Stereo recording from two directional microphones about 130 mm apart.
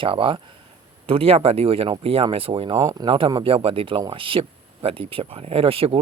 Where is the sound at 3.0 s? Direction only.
40° right (ahead or behind).